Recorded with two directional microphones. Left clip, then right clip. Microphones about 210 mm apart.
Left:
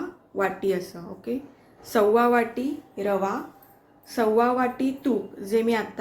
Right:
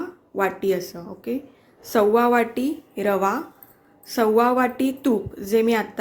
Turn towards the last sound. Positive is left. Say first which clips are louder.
# right 4 dB
turn(degrees=-30)  # may be behind; listen again after turning